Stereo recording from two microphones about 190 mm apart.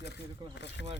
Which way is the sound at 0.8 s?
65° left (ahead or behind).